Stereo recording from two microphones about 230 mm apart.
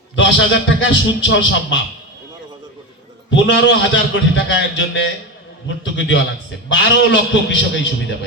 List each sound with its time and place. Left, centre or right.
0.2 s a man's voice: left
3.2 s a man's voice: left